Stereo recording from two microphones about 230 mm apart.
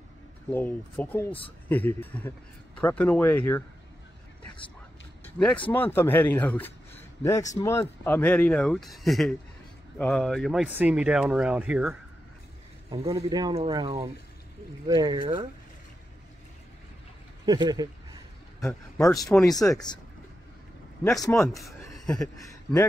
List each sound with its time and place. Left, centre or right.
0.5 s speech: centre
5.2 s speech: centre
13.1 s speech: centre
17.5 s speech: centre
18.6 s speech: centre
19.2 s speech: centre
19.7 s speech: centre
21.2 s a man's voice: centre